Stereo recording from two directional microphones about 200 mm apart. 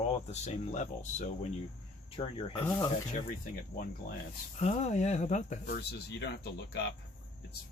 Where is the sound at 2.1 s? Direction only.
25° left (ahead or behind).